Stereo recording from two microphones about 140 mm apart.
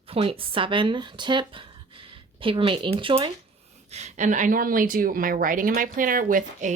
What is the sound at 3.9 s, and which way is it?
A woman's voice, 55° right (ahead or behind).